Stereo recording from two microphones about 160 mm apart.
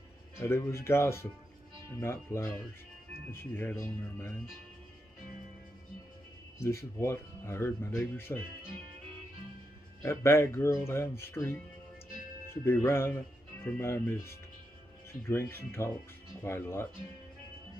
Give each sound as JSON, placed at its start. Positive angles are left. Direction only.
{"t": 0.4, "sound": "speech", "side_deg": 15}
{"t": 6.6, "sound": "speech", "side_deg": 15}
{"t": 10.0, "sound": "speech", "side_deg": 15}